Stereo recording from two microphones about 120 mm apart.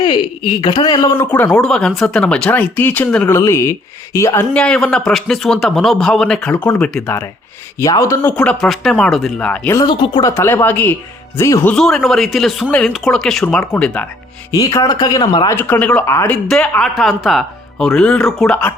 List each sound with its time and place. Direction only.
0.0 s speech: 40° left (ahead or behind)
1.5 s speech: 5° left (ahead or behind); by 4.4 s 25° left (ahead or behind)
4.5 s a man's voice: 10° left (ahead or behind)
7.8 s speech: 25° left (ahead or behind)
8.3 s a man's voice: 10° left (ahead or behind)
9.8 s speech: 40° left (ahead or behind)
10.2 s speech: 20° left (ahead or behind)
11.7 s a man's voice: 5° left (ahead or behind)
14.5 s speech: 30° left (ahead or behind)
15.4 s speech: 15° left (ahead or behind)
16.0 s speech: 20° left (ahead or behind)
16.3 s a man's voice: 10° left (ahead or behind)